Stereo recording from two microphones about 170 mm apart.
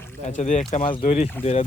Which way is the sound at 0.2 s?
45° left (ahead or behind).